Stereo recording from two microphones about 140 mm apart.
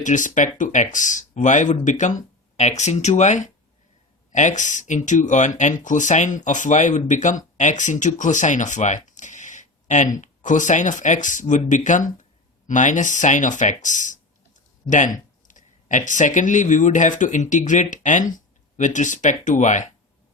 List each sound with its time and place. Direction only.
0.0 s speech: 65° left (ahead or behind)